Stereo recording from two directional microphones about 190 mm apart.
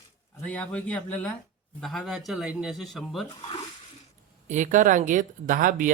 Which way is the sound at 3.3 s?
25° left (ahead or behind).